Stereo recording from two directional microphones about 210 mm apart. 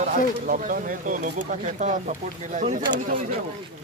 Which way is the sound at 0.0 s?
40° right (ahead or behind).